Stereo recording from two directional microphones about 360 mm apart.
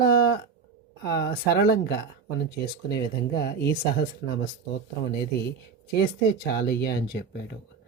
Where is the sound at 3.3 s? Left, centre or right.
Left.